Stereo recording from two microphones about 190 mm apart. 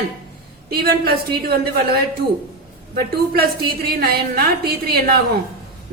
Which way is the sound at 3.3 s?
55° right (ahead or behind).